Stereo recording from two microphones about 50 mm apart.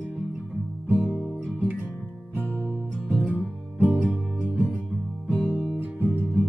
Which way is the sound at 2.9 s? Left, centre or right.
Centre.